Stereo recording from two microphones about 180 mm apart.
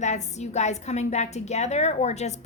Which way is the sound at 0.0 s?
40° left (ahead or behind).